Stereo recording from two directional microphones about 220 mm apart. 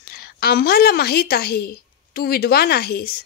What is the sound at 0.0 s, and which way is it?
A woman's voice, 45° left (ahead or behind).